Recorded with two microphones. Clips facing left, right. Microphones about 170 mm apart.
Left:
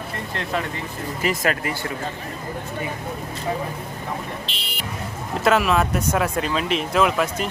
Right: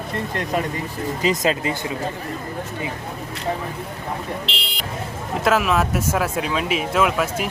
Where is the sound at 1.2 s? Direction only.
20° right (ahead or behind).